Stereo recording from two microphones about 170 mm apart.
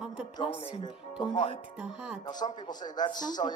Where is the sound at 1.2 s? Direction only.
30° left (ahead or behind).